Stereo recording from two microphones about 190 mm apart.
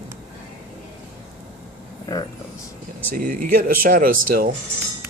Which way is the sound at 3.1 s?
45° right (ahead or behind).